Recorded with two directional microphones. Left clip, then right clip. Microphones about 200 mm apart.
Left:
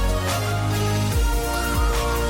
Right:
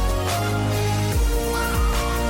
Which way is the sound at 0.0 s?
Centre (ahead or behind).